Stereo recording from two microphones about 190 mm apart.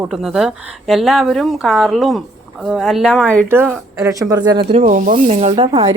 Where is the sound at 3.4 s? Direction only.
10° right (ahead or behind).